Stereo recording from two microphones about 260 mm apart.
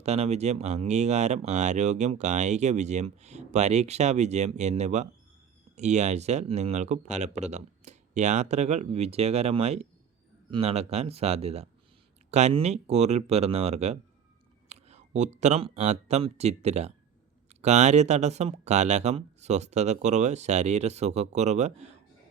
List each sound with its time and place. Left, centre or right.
0.0 s speech: right